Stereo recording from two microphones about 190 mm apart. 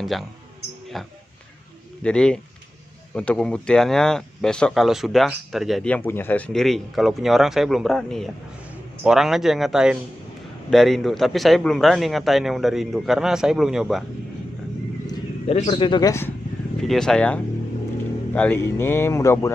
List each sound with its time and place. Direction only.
0.9 s speech: centre (ahead or behind)
15.4 s a man's voice: 30° left (ahead or behind)
16.8 s speech: centre (ahead or behind)